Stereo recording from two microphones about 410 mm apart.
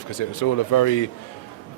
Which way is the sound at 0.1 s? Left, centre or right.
Left.